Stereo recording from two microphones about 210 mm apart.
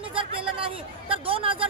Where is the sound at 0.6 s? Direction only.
25° right (ahead or behind).